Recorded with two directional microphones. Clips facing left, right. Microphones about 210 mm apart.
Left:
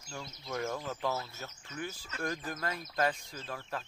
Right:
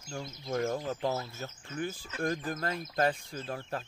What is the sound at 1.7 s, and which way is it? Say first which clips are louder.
Speech: right 5 dB; 50° right (ahead or behind).